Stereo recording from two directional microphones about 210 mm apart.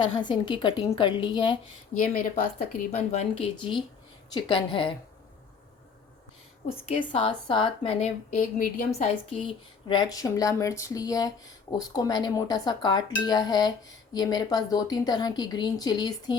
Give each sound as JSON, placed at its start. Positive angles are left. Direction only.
{"t": 0.2, "sound": "speech", "side_deg": 20}
{"t": 2.0, "sound": "speech", "side_deg": 40}
{"t": 6.9, "sound": "speech", "side_deg": 25}
{"t": 9.9, "sound": "speech", "side_deg": 20}